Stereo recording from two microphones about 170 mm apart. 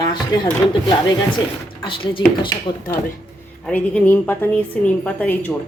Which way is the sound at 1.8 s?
30° left (ahead or behind).